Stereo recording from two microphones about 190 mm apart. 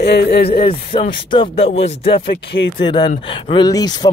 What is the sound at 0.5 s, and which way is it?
Speech, 30° left (ahead or behind).